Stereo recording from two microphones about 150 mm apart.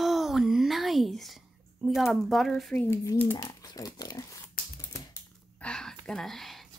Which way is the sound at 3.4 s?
25° left (ahead or behind).